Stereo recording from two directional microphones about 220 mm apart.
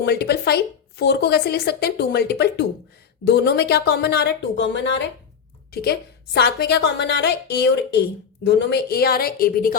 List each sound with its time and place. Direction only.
0.0 s a woman's voice: 45° left (ahead or behind)